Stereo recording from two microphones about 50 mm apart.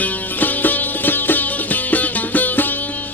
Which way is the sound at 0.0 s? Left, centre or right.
Left.